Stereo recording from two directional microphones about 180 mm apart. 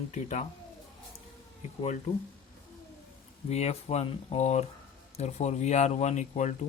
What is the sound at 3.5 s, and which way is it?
Speech, 35° left (ahead or behind).